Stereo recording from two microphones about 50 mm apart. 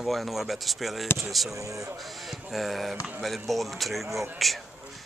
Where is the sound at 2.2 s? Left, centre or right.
Centre.